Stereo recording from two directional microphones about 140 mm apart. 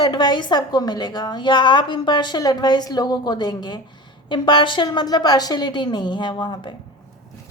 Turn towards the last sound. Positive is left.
turn(degrees=35)  # may be behind; listen again after turning